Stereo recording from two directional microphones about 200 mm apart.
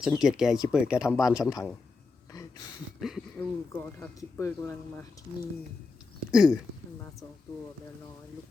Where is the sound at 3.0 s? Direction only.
Centre (ahead or behind).